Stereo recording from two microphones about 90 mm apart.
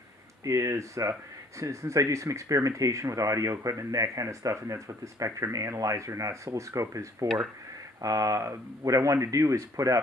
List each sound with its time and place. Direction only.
0.4 s speech: 35° right (ahead or behind)